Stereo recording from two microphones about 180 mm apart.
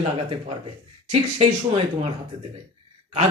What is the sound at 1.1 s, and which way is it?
Speech, 30° right (ahead or behind).